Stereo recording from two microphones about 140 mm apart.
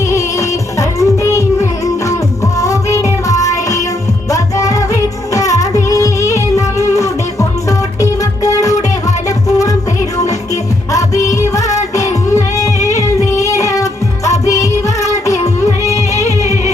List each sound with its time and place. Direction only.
0.1 s music: 25° left (ahead or behind)
2.6 s music: 25° left (ahead or behind)
10.9 s music: 25° left (ahead or behind)
13.3 s child singing: 20° left (ahead or behind)
14.3 s music: 20° left (ahead or behind)